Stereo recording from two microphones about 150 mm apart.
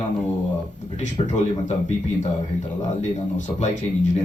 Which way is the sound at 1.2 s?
50° left (ahead or behind).